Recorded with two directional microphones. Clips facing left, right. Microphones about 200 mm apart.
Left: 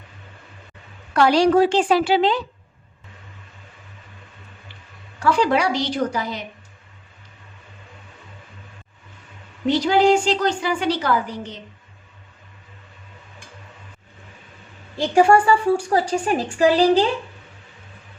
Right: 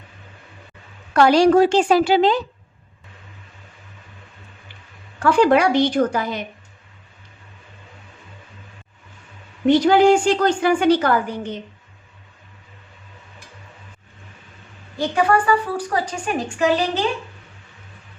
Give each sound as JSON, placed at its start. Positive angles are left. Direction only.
{"t": 1.1, "sound": "a woman's voice", "side_deg": -45}
{"t": 5.2, "sound": "a woman's voice", "side_deg": -55}
{"t": 9.6, "sound": "a woman's voice", "side_deg": -55}
{"t": 14.9, "sound": "a woman's voice", "side_deg": 30}